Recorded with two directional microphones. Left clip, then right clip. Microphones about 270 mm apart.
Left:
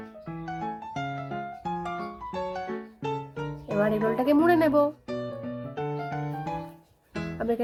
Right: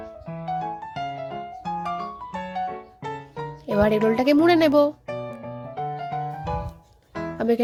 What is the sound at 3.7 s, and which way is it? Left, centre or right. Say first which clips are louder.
Speech: right 5 dB; right.